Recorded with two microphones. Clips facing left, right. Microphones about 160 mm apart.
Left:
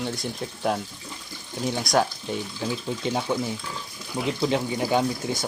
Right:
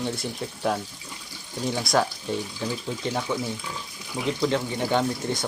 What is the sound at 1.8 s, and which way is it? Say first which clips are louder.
Speech: left 1 dB; centre (ahead or behind).